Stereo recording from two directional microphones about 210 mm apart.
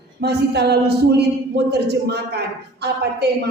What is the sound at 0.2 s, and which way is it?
A woman's voice, 50° right (ahead or behind).